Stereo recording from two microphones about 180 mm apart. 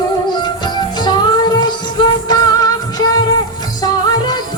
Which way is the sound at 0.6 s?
25° left (ahead or behind).